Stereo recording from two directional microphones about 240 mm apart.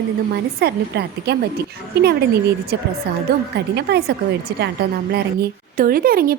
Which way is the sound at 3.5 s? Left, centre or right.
Right.